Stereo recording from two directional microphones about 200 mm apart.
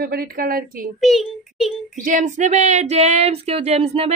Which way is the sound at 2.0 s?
40° right (ahead or behind).